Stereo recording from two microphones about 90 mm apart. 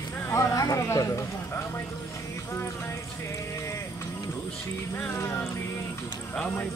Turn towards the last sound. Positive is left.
turn(degrees=10)  # may be behind; listen again after turning